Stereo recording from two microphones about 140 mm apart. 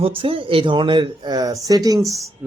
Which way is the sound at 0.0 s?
40° right (ahead or behind).